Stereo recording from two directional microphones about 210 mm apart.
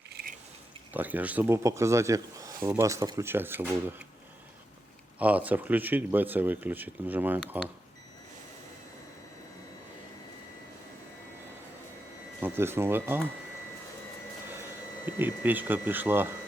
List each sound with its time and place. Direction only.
0.1 s a sound: 45° right (ahead or behind)
0.9 s speech: 10° right (ahead or behind)
5.2 s speech: 5° right (ahead or behind)
12.4 s speech: 10° right (ahead or behind)
15.0 s speech: 10° right (ahead or behind)